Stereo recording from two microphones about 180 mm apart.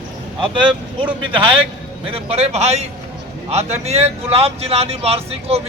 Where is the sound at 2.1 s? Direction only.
35° right (ahead or behind).